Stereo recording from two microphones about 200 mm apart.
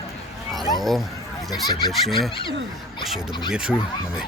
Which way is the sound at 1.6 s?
20° left (ahead or behind).